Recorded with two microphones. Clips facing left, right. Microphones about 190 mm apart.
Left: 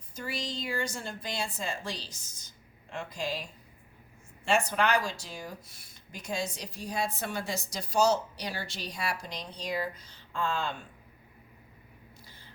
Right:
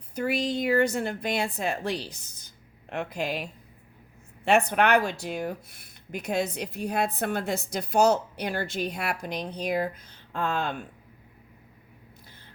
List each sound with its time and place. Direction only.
0.1 s speech: 60° right (ahead or behind)